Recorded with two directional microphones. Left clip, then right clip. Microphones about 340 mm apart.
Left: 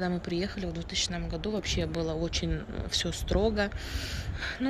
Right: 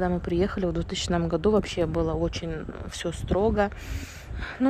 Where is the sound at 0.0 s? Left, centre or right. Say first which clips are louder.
Right 6 dB; centre.